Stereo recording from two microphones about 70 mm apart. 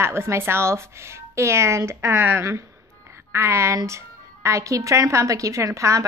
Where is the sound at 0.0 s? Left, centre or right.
Right.